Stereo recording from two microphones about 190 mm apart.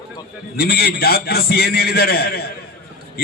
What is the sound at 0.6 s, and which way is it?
A man's voice, 55° left (ahead or behind).